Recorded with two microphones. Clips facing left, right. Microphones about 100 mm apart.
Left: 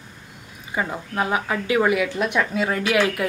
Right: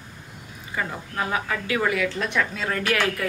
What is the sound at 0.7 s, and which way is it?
A woman's voice, 20° left (ahead or behind).